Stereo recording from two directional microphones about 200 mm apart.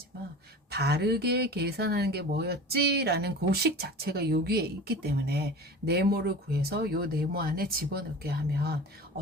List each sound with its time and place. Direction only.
0.7 s speech: 55° right (ahead or behind)